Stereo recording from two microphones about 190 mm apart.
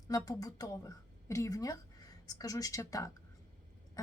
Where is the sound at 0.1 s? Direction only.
20° left (ahead or behind).